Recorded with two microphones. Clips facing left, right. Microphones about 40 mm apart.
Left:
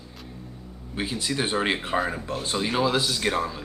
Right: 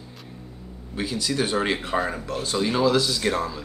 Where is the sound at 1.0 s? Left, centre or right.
Left.